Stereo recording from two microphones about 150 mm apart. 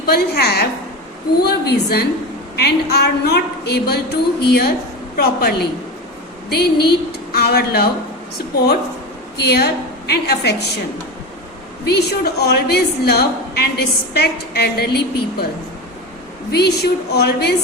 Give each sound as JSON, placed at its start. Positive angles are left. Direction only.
{"t": 0.0, "sound": "a woman's voice", "side_deg": 90}
{"t": 9.4, "sound": "a woman's voice", "side_deg": 90}
{"t": 11.9, "sound": "a woman's voice", "side_deg": 90}
{"t": 16.5, "sound": "a woman's voice", "side_deg": 90}